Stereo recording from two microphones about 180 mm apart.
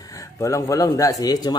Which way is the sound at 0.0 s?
20° left (ahead or behind).